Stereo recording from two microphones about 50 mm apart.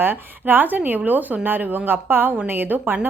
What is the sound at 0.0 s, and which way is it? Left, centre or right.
A woman's voice, right.